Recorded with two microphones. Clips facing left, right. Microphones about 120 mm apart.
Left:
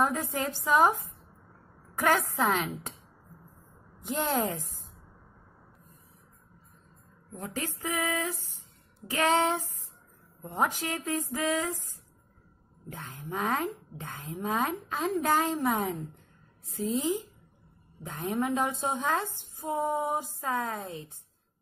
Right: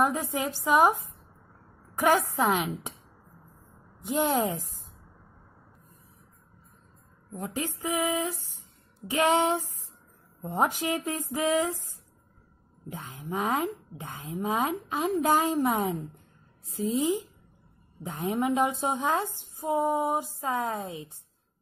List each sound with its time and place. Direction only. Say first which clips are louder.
0.0 s a woman's voice: right 2 dB; 15° right (ahead or behind)
2.0 s a woman's voice: right 3 dB; 15° right (ahead or behind)
4.1 s a woman's voice: right 3 dB; 15° right (ahead or behind)
7.3 s a woman's voice: right 3 dB; 20° right (ahead or behind)
13.1 s a woman's voice: right 2 dB; 15° right (ahead or behind)
18.0 s a woman's voice: right 2 dB; 15° right (ahead or behind)